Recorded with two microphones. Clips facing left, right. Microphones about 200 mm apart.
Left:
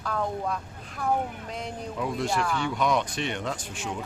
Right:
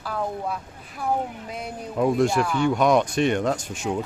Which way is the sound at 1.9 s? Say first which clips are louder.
Right 10 dB; 50° right (ahead or behind).